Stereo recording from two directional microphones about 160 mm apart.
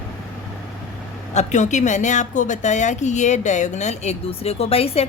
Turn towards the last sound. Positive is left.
turn(degrees=40)  # may be behind; listen again after turning